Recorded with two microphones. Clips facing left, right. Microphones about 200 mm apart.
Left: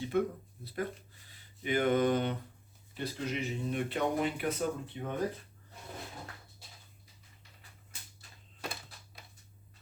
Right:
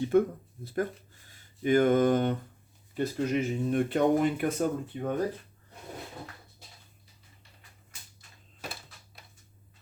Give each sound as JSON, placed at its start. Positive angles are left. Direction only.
{"t": 0.1, "sound": "speech", "side_deg": -45}
{"t": 1.3, "sound": "speech", "side_deg": -45}